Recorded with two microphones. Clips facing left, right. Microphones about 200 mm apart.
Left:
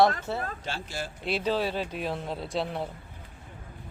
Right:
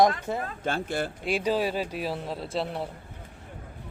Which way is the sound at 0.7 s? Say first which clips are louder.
Right 7 dB; 55° right (ahead or behind).